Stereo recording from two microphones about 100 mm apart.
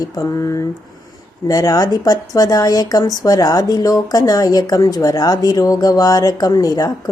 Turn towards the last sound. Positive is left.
turn(degrees=35)  # may be behind; listen again after turning